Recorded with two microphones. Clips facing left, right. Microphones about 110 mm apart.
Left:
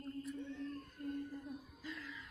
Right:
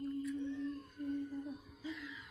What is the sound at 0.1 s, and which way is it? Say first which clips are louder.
Whale vocalization: right 5 dB; 15° right (ahead or behind).